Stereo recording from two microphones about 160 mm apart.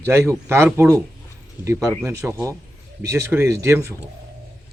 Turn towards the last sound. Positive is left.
turn(degrees=-15)  # may be behind; listen again after turning